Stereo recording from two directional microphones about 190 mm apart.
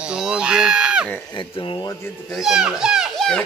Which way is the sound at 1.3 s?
25° left (ahead or behind).